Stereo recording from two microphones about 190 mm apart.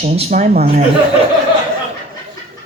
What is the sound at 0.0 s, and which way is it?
Speech, 40° right (ahead or behind).